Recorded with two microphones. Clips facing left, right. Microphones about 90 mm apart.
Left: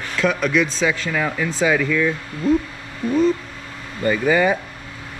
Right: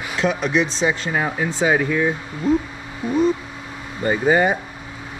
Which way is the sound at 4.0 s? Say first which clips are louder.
Even; 25° right (ahead or behind).